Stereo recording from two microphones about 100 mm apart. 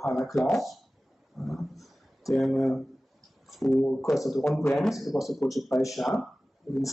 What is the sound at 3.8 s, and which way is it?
A man's voice, 5° left (ahead or behind).